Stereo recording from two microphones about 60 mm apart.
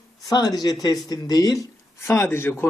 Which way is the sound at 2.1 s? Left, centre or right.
Left.